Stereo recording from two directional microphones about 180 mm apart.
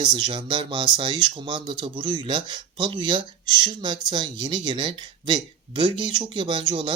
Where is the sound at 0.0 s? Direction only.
25° right (ahead or behind).